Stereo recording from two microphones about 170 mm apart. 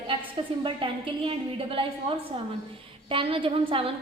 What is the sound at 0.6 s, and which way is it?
A woman's voice, 30° right (ahead or behind).